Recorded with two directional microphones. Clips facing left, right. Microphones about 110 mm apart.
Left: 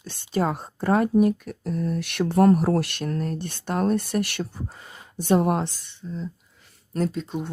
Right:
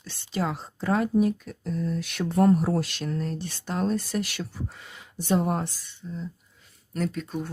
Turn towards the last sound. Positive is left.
turn(degrees=25)  # may be behind; listen again after turning